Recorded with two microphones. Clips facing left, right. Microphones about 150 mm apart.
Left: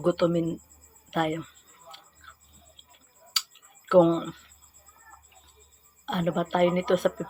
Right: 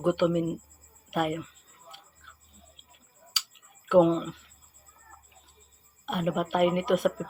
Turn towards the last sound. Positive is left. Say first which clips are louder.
# left 1 dB
turn(degrees=-10)  # may be behind; listen again after turning